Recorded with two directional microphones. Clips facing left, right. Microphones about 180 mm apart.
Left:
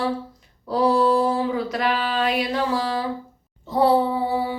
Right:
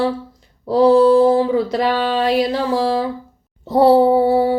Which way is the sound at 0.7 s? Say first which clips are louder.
Right 8 dB; 35° right (ahead or behind).